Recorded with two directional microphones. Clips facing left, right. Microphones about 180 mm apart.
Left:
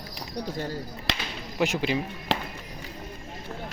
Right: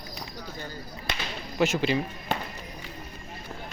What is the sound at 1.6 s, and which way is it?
Speech, 15° left (ahead or behind).